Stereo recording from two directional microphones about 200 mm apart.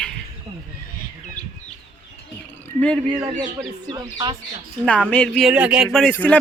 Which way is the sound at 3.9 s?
20° right (ahead or behind).